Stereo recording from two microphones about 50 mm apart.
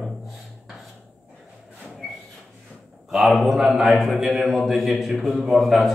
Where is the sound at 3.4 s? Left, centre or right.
Centre.